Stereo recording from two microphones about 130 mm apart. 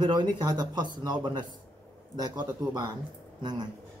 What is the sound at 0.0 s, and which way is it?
A man's voice, 35° right (ahead or behind).